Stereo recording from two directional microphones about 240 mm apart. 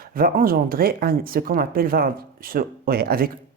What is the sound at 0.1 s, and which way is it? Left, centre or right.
Speech, right.